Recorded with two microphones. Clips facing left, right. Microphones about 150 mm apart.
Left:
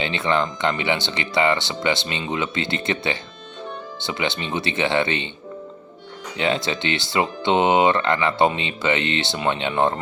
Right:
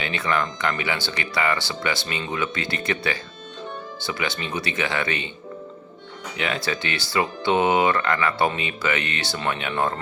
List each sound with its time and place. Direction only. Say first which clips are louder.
0.0 s speech: left 3 dB; 25° left (ahead or behind)
6.3 s speech: left 4 dB; 30° left (ahead or behind)